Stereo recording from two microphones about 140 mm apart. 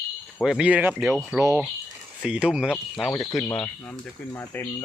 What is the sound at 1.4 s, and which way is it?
Speech, 20° right (ahead or behind).